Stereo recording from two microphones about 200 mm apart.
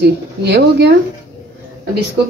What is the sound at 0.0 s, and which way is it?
Speech, 55° right (ahead or behind).